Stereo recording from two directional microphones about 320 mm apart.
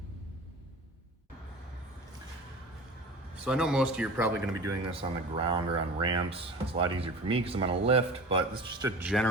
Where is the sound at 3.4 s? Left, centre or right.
Centre.